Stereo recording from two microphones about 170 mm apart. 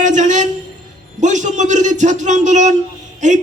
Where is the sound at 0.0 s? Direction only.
45° right (ahead or behind).